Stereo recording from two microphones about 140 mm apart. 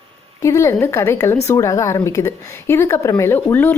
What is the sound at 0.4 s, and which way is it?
A woman's voice, 20° left (ahead or behind).